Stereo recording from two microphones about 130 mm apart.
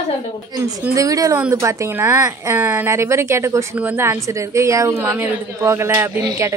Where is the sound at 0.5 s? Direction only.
30° right (ahead or behind).